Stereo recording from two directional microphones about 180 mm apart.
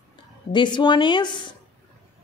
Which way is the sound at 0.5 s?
25° left (ahead or behind).